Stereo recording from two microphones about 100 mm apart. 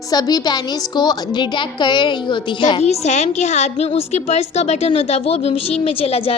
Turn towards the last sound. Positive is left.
turn(degrees=70)  # may be behind; listen again after turning